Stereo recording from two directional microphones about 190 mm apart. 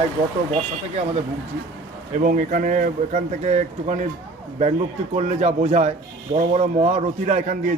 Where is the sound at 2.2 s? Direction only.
45° right (ahead or behind).